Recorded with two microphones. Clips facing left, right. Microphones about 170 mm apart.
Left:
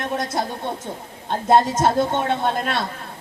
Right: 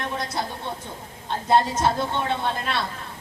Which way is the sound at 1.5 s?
45° left (ahead or behind).